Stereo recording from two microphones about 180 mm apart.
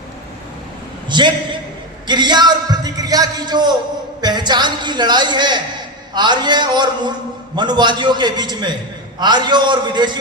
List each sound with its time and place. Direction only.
1.1 s a man's voice: 25° right (ahead or behind)